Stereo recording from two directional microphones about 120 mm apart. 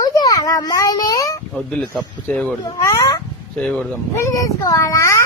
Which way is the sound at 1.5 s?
10° left (ahead or behind).